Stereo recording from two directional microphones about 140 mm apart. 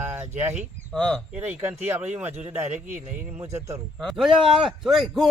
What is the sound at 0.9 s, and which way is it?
Speech, 5° left (ahead or behind).